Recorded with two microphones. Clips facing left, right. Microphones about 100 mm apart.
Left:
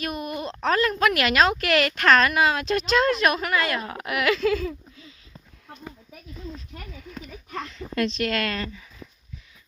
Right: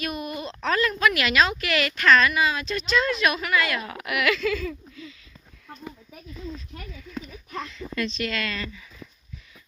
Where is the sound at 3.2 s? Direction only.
40° left (ahead or behind).